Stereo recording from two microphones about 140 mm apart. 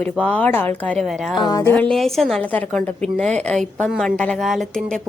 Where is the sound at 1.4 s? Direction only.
30° left (ahead or behind).